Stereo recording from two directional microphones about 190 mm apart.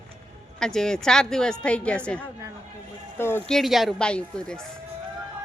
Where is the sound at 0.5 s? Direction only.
5° left (ahead or behind).